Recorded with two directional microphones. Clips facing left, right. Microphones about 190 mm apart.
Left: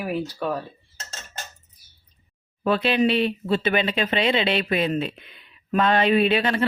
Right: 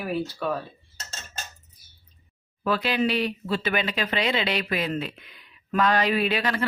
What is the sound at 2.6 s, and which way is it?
Speech, 25° left (ahead or behind).